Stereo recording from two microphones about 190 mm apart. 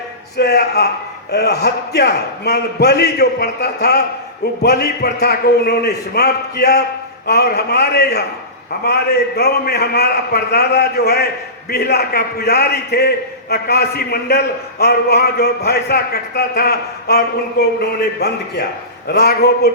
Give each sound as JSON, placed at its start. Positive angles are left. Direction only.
{"t": 0.3, "sound": "a man's voice", "side_deg": 60}